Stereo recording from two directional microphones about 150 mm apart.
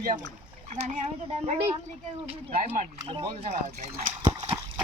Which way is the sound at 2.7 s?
40° right (ahead or behind).